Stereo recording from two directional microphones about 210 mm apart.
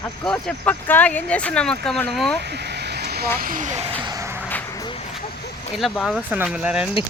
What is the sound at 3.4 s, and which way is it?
Speech, 40° right (ahead or behind).